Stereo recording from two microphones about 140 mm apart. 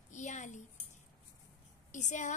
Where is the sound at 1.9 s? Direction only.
60° left (ahead or behind).